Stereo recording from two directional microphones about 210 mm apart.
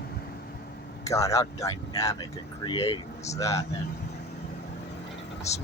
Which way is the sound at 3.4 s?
15° left (ahead or behind).